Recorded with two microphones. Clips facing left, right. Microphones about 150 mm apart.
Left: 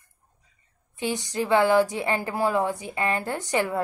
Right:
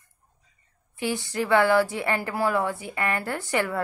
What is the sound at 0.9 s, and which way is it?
A woman's voice, 20° left (ahead or behind).